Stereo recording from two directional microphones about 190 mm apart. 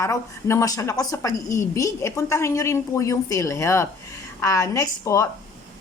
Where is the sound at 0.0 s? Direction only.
15° left (ahead or behind).